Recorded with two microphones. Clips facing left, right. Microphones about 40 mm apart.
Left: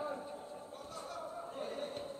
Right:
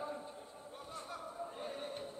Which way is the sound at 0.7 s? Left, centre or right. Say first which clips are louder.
Right 2 dB; right.